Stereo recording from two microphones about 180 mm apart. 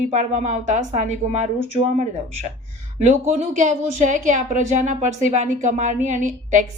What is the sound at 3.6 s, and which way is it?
A woman's voice, 40° right (ahead or behind).